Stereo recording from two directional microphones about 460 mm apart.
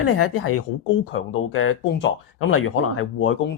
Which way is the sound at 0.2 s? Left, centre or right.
Left.